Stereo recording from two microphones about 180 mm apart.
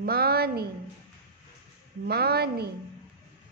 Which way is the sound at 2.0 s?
60° right (ahead or behind).